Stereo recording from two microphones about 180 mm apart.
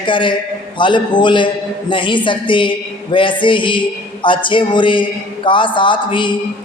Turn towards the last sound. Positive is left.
turn(degrees=25)  # may be behind; listen again after turning